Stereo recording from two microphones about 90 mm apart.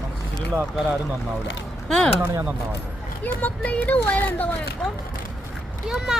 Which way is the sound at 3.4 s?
15° left (ahead or behind).